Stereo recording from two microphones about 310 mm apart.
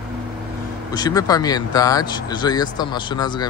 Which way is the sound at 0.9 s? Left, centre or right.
Centre.